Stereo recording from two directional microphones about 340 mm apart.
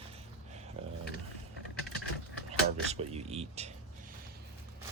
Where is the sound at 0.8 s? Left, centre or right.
Centre.